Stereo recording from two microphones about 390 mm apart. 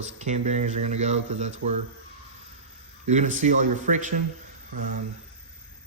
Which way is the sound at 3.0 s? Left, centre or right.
Centre.